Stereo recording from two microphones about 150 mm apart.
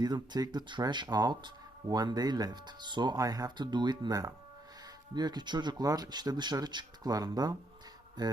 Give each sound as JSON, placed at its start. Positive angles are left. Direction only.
{"t": 0.0, "sound": "speech", "side_deg": -25}